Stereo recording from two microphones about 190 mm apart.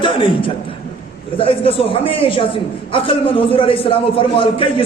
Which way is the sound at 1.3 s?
30° left (ahead or behind).